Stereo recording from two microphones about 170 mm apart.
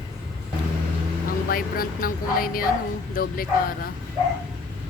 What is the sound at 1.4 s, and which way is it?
Speech, 60° left (ahead or behind).